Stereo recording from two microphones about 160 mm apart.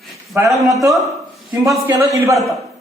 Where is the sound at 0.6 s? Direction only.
20° right (ahead or behind).